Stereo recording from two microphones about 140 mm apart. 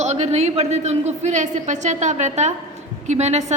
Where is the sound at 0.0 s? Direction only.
55° right (ahead or behind).